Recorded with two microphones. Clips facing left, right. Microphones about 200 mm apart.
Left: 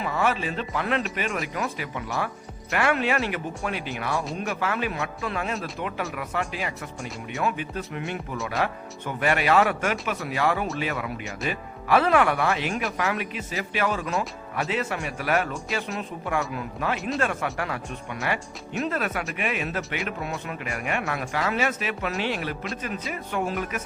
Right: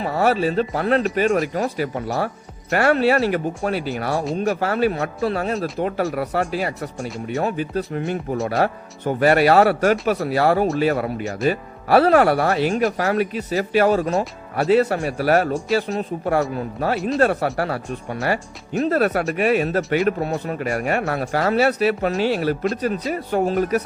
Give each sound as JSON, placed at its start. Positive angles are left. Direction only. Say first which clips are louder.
{"t": 0.0, "sound": "speech", "louder": "right 7 dB", "side_deg": -40}